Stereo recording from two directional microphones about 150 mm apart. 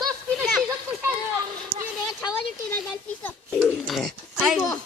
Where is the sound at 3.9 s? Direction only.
Centre (ahead or behind).